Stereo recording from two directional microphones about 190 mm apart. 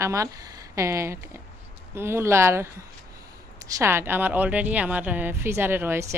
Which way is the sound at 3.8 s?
15° right (ahead or behind).